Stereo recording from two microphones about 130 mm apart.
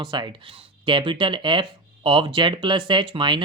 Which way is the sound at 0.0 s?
35° right (ahead or behind).